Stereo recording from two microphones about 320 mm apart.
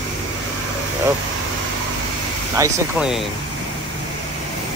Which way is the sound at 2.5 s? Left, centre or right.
Centre.